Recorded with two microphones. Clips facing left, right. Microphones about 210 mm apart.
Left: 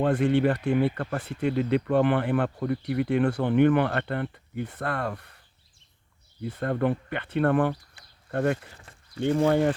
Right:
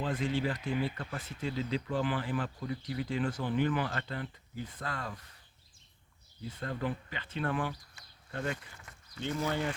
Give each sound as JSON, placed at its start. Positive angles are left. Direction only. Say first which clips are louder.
{"t": 0.0, "sound": "speech", "louder": "left 10 dB", "side_deg": 65}
{"t": 6.4, "sound": "speech", "louder": "left 10 dB", "side_deg": 60}
{"t": 8.8, "sound": "a sound", "louder": "left 9 dB", "side_deg": 30}
{"t": 9.5, "sound": "speech", "louder": "left 11 dB", "side_deg": 55}